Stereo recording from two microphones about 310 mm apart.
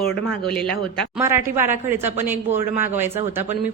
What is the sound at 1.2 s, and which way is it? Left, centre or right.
Speech, centre.